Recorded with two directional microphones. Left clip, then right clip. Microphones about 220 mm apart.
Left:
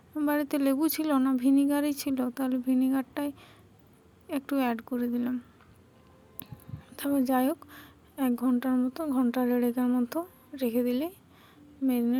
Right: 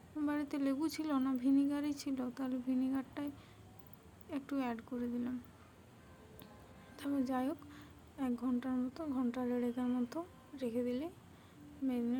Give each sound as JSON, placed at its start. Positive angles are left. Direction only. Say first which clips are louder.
{"t": 0.2, "sound": "speech", "louder": "left 10 dB", "side_deg": 40}
{"t": 6.9, "sound": "a woman's voice", "louder": "left 11 dB", "side_deg": 40}